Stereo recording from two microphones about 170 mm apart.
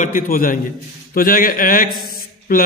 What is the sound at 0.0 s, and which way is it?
A man's voice, 55° left (ahead or behind).